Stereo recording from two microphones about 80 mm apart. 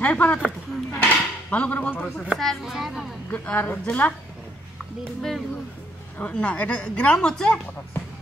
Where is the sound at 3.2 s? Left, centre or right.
Left.